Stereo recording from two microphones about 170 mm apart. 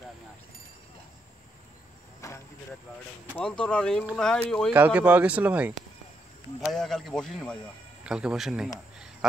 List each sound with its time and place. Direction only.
2.2 s vehicle: 20° left (ahead or behind)
3.3 s speech: 5° left (ahead or behind)
4.7 s speech: 10° right (ahead or behind)
6.6 s speech: 5° left (ahead or behind)